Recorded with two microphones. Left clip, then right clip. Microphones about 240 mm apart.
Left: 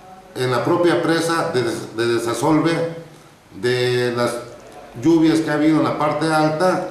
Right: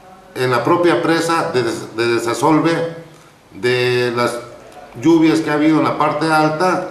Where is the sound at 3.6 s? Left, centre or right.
Centre.